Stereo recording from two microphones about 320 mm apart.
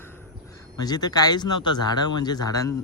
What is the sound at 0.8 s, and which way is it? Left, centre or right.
Speech, centre.